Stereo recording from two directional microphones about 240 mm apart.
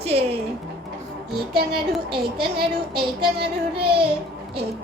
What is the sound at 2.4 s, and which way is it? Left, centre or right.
Speech, right.